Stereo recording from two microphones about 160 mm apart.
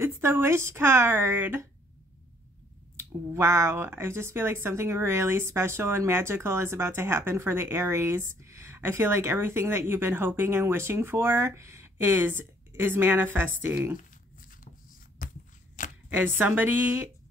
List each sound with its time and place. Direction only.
0.0 s speech: 15° right (ahead or behind)
3.0 s speech: 15° right (ahead or behind)
15.2 s a sound: 60° left (ahead or behind)
16.1 s speech: 10° right (ahead or behind)